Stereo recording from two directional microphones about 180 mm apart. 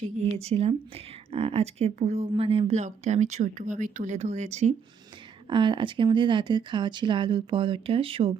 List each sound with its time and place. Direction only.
0.4 s speech: 35° right (ahead or behind)
5.5 s speech: 25° right (ahead or behind)